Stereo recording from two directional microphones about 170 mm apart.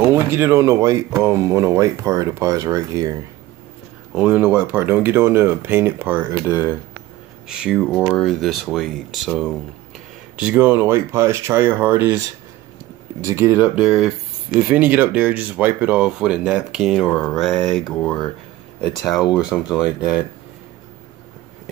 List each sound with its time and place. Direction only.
0.0 s speech: 15° right (ahead or behind)
4.1 s speech: 5° right (ahead or behind)
13.2 s speech: 15° right (ahead or behind)